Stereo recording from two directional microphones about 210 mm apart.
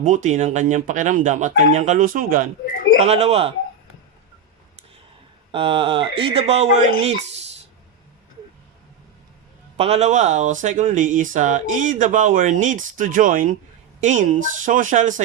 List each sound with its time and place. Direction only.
0.0 s speech: 35° right (ahead or behind)
5.5 s speech: 25° right (ahead or behind)
9.7 s speech: 30° right (ahead or behind)